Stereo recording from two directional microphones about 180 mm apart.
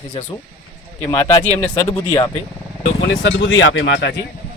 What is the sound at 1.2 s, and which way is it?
Speech, 15° left (ahead or behind).